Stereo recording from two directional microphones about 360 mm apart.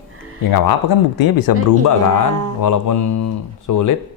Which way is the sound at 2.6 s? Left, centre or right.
Left.